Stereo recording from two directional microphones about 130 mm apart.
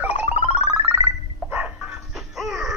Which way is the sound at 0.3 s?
50° left (ahead or behind).